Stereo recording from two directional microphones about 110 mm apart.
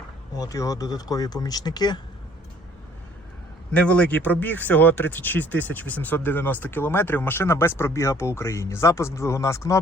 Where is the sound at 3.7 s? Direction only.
10° left (ahead or behind).